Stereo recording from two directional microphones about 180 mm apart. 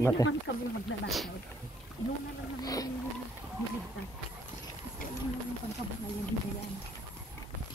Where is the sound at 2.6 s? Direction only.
20° left (ahead or behind).